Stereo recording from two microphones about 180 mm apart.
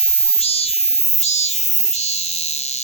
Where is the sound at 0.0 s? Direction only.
35° left (ahead or behind).